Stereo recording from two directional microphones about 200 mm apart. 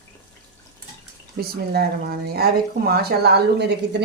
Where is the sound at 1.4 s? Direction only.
50° right (ahead or behind).